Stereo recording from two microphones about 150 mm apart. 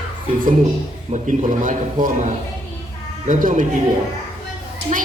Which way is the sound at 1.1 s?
55° right (ahead or behind).